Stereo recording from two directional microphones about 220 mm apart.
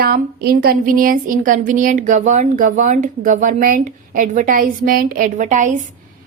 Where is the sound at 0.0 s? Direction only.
45° right (ahead or behind).